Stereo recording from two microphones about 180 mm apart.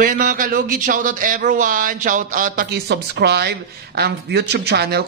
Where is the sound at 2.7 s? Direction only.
65° right (ahead or behind).